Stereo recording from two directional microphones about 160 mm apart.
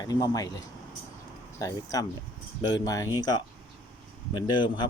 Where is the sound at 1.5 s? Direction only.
20° left (ahead or behind).